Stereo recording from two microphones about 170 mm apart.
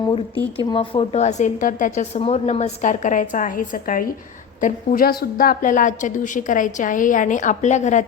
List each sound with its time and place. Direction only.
0.0 s a woman's voice: 30° left (ahead or behind)